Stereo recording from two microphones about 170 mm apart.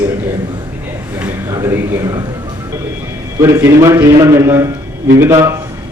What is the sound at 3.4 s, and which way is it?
A man's voice, 15° right (ahead or behind).